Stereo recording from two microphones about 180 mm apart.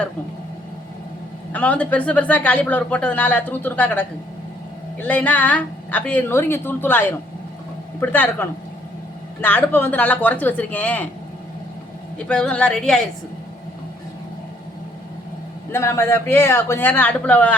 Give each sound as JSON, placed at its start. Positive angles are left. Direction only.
{"t": 1.5, "sound": "a woman's voice", "side_deg": 10}
{"t": 8.0, "sound": "a woman's voice", "side_deg": 10}
{"t": 12.3, "sound": "a woman's voice", "side_deg": 5}
{"t": 15.7, "sound": "a woman's voice", "side_deg": 15}